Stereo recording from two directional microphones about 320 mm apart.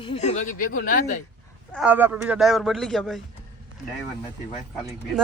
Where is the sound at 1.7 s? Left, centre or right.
Centre.